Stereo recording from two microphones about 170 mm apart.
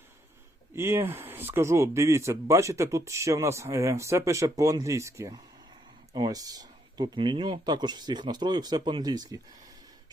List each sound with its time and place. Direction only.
0.8 s speech: 15° right (ahead or behind)